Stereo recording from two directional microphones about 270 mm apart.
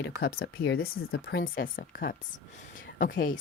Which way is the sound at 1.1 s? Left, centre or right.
Left.